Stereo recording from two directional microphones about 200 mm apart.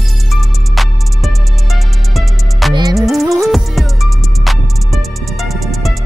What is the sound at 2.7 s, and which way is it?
Music, 20° right (ahead or behind).